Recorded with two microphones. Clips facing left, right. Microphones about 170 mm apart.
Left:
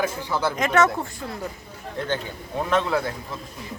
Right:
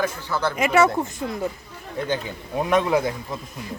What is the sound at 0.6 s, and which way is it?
Speech, 10° right (ahead or behind).